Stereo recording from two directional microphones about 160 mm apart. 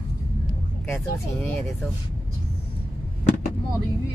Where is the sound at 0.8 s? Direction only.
15° left (ahead or behind).